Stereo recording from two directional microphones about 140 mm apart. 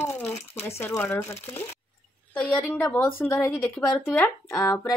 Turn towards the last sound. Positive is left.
turn(degrees=20)  # may be behind; listen again after turning